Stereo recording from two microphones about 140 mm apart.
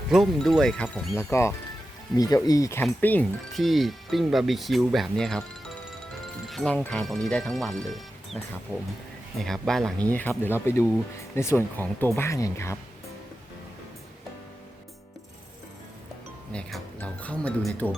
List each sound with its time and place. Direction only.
0.1 s speech: 5° right (ahead or behind)
1.1 s speech: 20° left (ahead or behind)
3.5 s speech: centre (ahead or behind)
6.5 s speech: centre (ahead or behind)
8.7 s speech: 10° right (ahead or behind)
9.4 s speech: centre (ahead or behind)
10.1 s speech: 15° left (ahead or behind)
16.5 s speech: 5° left (ahead or behind)